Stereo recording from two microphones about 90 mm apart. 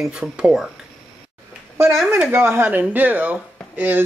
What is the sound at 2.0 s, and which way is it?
Speech, 25° right (ahead or behind).